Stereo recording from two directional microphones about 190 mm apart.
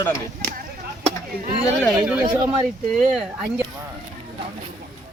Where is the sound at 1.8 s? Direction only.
5° right (ahead or behind).